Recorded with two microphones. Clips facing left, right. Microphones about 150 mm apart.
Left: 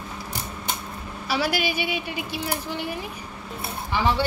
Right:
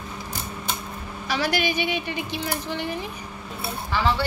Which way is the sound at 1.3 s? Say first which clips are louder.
Even; 10° left (ahead or behind).